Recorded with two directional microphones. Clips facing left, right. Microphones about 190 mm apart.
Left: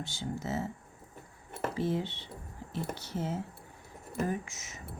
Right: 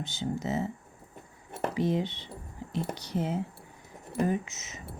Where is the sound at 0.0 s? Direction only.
20° right (ahead or behind).